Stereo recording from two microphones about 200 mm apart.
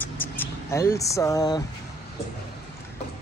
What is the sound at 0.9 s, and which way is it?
Speech, 15° left (ahead or behind).